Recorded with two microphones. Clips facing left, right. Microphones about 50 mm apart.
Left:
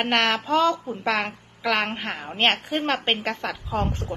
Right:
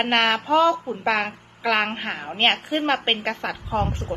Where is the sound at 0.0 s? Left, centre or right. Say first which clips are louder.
Right 2 dB; centre.